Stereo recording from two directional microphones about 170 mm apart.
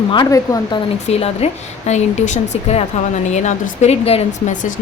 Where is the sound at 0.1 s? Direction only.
25° left (ahead or behind).